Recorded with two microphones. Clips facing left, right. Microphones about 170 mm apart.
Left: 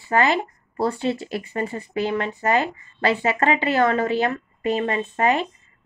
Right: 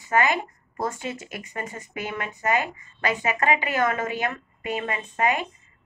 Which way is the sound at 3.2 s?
35° left (ahead or behind).